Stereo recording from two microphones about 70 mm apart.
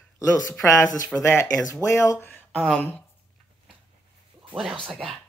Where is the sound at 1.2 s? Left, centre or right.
Left.